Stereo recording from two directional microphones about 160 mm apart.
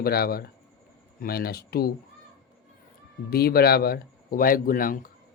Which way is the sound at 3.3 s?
70° left (ahead or behind).